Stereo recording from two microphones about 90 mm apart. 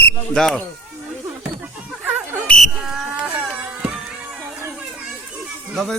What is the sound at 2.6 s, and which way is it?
Insect, 5° right (ahead or behind).